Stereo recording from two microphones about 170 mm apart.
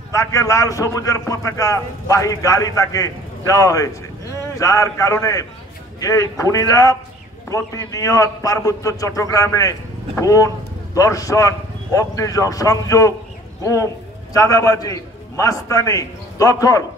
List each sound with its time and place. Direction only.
0.1 s a man's voice: 20° left (ahead or behind)